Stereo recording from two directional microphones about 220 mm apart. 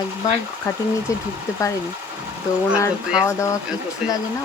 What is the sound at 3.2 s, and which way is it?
Speech, 15° left (ahead or behind).